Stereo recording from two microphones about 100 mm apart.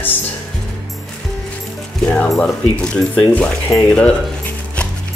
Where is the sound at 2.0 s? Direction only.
10° left (ahead or behind).